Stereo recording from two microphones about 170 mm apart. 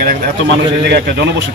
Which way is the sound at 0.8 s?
80° right.